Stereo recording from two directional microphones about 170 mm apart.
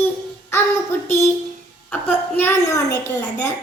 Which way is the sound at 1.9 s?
15° left (ahead or behind).